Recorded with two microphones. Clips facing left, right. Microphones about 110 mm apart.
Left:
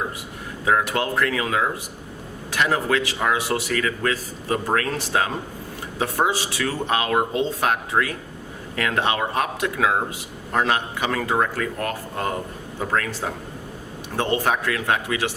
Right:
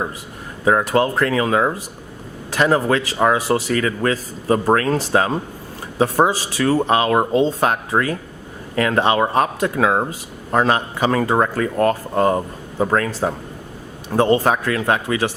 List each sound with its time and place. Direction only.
0.6 s a man's voice: 35° right (ahead or behind)